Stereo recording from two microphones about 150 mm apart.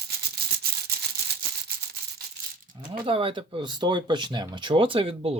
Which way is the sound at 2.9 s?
35° right (ahead or behind).